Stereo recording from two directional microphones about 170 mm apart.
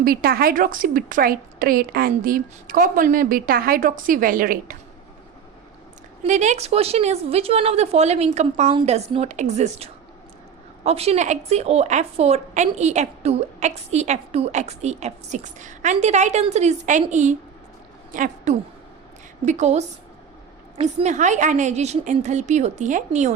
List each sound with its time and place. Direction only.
0.0 s a woman's voice: 60° right (ahead or behind)
6.2 s a woman's voice: 45° right (ahead or behind)